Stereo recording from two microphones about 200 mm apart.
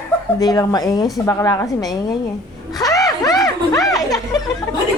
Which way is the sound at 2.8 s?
15° left (ahead or behind).